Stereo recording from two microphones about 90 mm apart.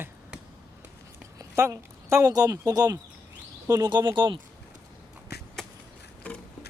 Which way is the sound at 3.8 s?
55° right (ahead or behind).